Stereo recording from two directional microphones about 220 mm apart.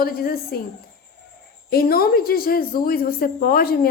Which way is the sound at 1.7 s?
45° left (ahead or behind).